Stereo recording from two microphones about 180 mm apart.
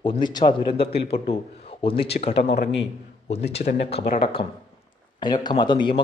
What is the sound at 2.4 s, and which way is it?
A man's voice, 45° left (ahead or behind).